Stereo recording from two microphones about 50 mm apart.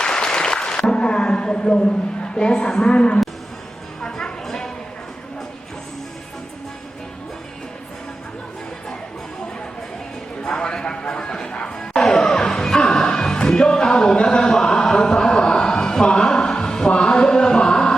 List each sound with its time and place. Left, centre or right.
0.0 s a sound: centre
4.0 s music: centre
10.4 s music: centre